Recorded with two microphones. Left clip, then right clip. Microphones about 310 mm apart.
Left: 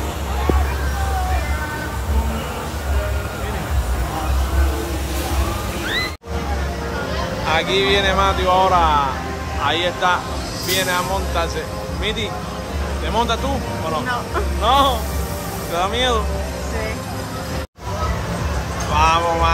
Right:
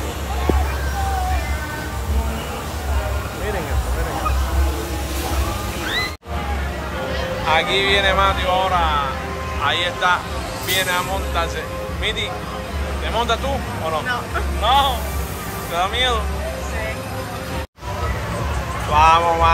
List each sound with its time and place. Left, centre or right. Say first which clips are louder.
7.4 s speech: right 1 dB; centre
14.6 s speech: left 1 dB; centre
18.9 s speech: right 3 dB; centre